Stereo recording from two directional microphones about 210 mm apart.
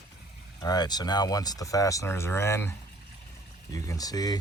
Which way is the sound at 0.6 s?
20° left (ahead or behind).